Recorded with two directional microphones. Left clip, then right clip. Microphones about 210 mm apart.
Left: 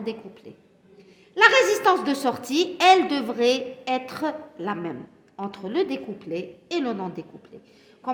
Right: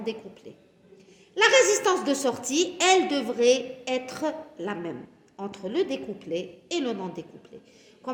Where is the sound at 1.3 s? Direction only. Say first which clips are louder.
Left 2 dB; 40° left (ahead or behind).